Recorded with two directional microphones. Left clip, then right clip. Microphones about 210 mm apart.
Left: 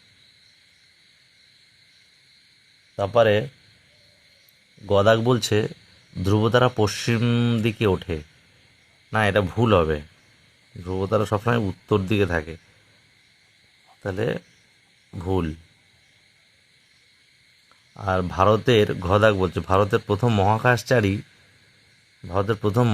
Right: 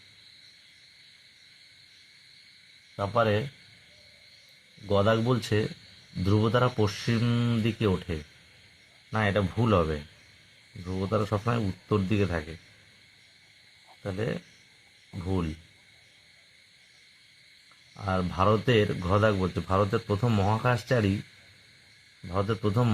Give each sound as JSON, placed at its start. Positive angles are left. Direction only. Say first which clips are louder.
{"t": 2.9, "sound": "speech", "louder": "left 8 dB", "side_deg": 55}
{"t": 4.9, "sound": "speech", "louder": "left 7 dB", "side_deg": 50}
{"t": 14.0, "sound": "speech", "louder": "left 7 dB", "side_deg": 50}
{"t": 17.9, "sound": "speech", "louder": "left 6 dB", "side_deg": 50}
{"t": 22.3, "sound": "speech", "louder": "left 6 dB", "side_deg": 50}